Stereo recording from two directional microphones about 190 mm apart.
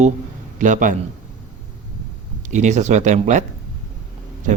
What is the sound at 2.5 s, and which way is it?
Speech, 40° right (ahead or behind).